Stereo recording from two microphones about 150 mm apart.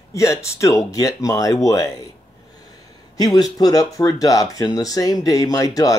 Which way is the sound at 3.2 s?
25° left (ahead or behind).